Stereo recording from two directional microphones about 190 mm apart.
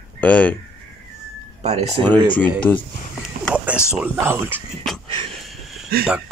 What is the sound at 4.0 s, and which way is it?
Speech, 10° right (ahead or behind).